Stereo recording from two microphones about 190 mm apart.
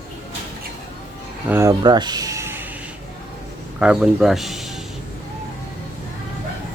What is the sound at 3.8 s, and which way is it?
Speech, 5° right (ahead or behind).